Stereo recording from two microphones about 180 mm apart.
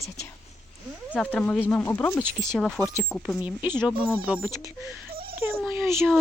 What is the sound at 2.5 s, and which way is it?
Speech, centre (ahead or behind).